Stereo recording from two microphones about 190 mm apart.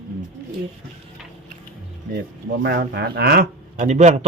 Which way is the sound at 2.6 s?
60° right (ahead or behind).